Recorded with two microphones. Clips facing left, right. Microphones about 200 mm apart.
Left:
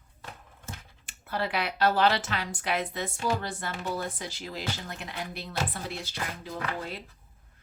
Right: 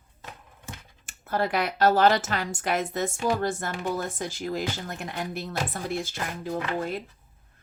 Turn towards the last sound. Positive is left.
turn(degrees=-50)  # may be behind; listen again after turning